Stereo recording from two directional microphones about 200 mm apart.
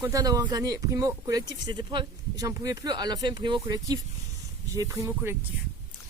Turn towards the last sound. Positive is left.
turn(degrees=-15)  # may be behind; listen again after turning